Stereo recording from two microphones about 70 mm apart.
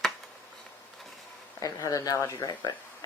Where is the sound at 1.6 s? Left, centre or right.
Left.